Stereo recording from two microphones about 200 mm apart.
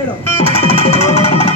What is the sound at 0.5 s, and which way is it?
Music, 30° left (ahead or behind).